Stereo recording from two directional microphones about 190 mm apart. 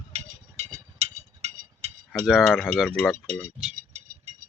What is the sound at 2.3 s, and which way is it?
Speech, centre (ahead or behind).